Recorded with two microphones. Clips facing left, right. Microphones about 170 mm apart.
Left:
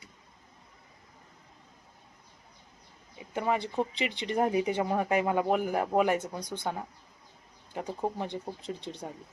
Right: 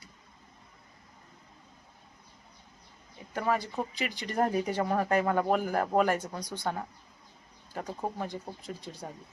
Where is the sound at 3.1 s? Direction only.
15° left (ahead or behind).